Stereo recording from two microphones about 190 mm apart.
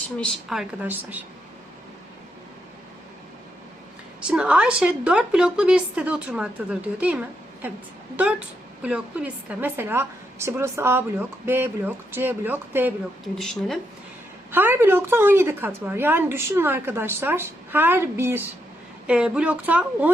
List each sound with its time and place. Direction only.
0.2 s a woman's voice: centre (ahead or behind)
4.3 s a woman's voice: 5° right (ahead or behind)
13.3 s a woman's voice: centre (ahead or behind)
14.5 s a woman's voice: 10° right (ahead or behind)